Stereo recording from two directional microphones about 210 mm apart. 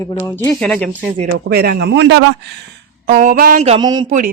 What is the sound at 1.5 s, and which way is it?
Speech, 50° right (ahead or behind).